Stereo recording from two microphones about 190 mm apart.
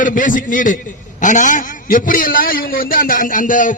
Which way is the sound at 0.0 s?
45° left (ahead or behind).